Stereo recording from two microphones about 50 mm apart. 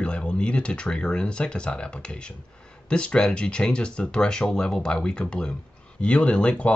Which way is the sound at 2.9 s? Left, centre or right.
Left.